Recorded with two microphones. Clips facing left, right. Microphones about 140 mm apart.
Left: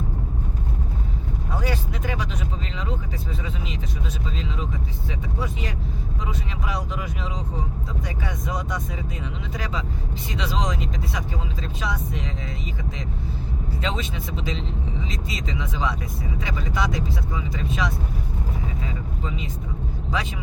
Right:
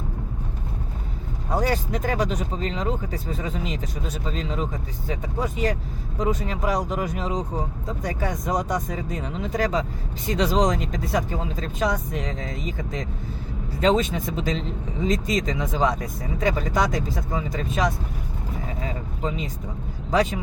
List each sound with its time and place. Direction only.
1.5 s speech: 40° right (ahead or behind)
20.1 s speech: 45° right (ahead or behind)